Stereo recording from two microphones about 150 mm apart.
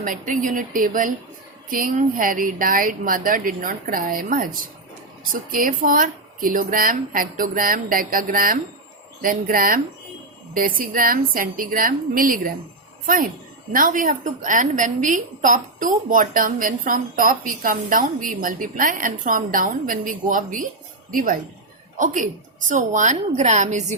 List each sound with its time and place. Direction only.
0.0 s a woman's voice: 65° right (ahead or behind)
13.7 s a woman's voice: 60° right (ahead or behind)
21.9 s a woman's voice: 60° right (ahead or behind)